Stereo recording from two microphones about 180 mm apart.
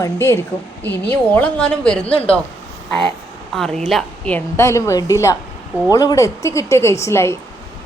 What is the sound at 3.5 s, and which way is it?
A woman's voice, centre (ahead or behind).